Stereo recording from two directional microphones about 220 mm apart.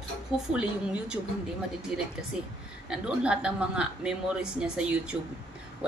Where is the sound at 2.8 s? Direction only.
5° right (ahead or behind).